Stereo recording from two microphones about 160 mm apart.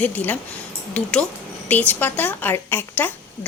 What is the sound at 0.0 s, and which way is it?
Frying, 10° left (ahead or behind).